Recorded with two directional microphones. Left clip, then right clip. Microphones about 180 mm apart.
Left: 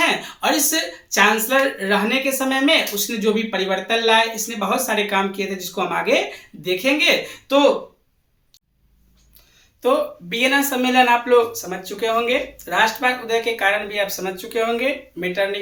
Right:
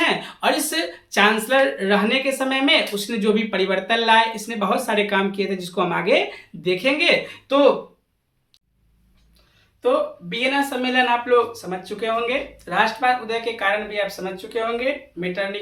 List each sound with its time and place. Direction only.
0.0 s speech: 20° right (ahead or behind)
9.8 s speech: 20° left (ahead or behind)